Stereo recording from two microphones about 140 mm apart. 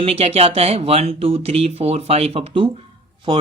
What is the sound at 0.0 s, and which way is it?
Speech, 45° right (ahead or behind).